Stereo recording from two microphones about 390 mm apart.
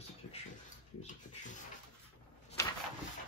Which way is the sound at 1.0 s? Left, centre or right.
Centre.